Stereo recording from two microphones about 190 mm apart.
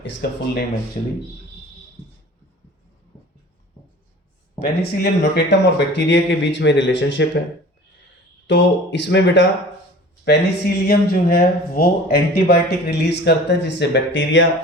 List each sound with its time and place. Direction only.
0.0 s speech: 70° left (ahead or behind)
4.6 s speech: 60° left (ahead or behind)
8.4 s speech: 70° left (ahead or behind)